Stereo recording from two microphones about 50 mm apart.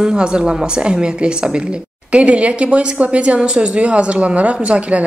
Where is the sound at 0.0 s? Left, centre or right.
Centre.